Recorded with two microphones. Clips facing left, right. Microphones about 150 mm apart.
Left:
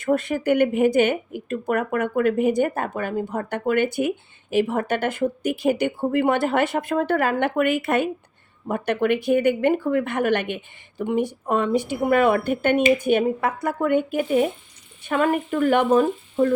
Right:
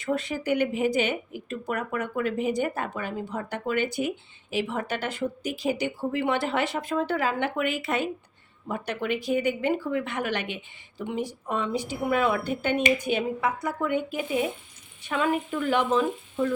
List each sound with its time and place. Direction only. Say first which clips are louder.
0.0 s a woman's voice: left 6 dB; 50° left (ahead or behind)